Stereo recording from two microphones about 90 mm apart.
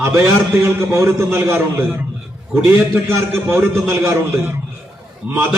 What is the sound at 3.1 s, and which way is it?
A man's voice, 25° right (ahead or behind).